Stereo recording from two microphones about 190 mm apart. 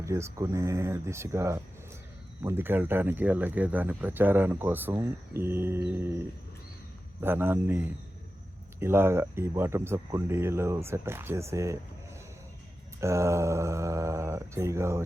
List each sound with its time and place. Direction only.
0.0 s speech: 15° right (ahead or behind)
13.0 s speech: 15° right (ahead or behind)